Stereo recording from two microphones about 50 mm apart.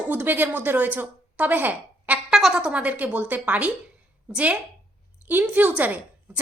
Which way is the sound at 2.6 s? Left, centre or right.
Right.